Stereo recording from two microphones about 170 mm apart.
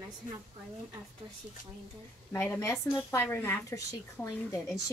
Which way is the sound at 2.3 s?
10° left (ahead or behind).